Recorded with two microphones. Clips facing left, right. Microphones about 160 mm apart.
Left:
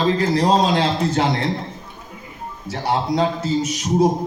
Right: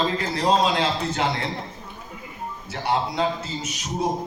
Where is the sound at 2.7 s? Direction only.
40° left (ahead or behind).